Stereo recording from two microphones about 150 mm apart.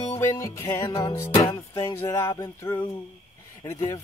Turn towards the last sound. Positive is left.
turn(degrees=20)  # may be behind; listen again after turning